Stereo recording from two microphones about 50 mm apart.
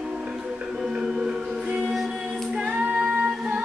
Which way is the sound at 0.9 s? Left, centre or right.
Centre.